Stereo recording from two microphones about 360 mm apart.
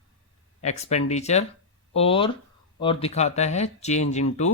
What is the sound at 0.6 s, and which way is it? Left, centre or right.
Speech, centre.